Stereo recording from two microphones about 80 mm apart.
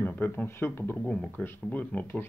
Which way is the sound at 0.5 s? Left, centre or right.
Left.